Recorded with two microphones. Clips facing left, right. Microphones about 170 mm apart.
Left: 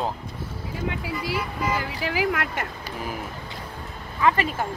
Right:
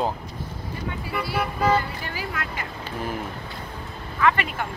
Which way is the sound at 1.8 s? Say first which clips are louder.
Left 4 dB; 90° left.